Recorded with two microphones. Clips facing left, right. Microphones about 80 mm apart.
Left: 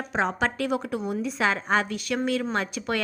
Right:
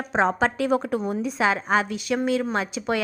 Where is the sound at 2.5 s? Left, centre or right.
Centre.